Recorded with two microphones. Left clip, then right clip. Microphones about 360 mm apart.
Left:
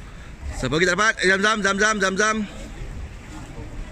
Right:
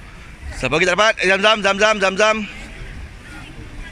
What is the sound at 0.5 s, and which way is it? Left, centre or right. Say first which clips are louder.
A man's voice: right 4 dB; centre.